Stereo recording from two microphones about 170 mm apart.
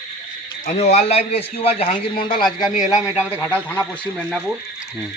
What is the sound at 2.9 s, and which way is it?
Speech, 5° right (ahead or behind).